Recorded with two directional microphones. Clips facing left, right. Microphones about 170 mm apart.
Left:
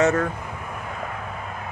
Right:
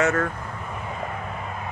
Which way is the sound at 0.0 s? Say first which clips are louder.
Left 2 dB; 15° left (ahead or behind).